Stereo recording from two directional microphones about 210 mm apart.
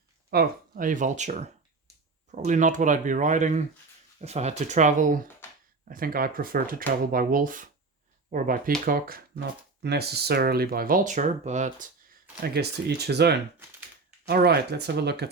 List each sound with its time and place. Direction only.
0.3 s speech: 45° right (ahead or behind)
12.6 s speech: 50° right (ahead or behind)